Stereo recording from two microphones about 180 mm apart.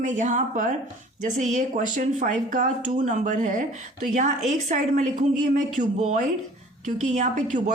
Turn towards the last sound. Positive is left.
turn(degrees=-40)  # may be behind; listen again after turning